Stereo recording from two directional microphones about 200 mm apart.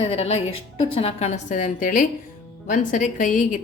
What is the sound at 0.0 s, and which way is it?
Speech, 30° left (ahead or behind).